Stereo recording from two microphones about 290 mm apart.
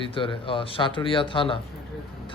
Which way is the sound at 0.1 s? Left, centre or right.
Centre.